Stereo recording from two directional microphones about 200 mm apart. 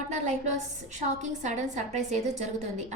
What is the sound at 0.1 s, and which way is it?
A woman's voice, 35° right (ahead or behind).